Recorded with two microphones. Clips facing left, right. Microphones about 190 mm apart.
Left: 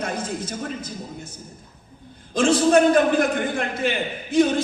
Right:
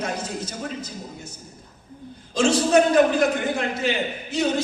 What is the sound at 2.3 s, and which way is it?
A man's voice, 55° left (ahead or behind).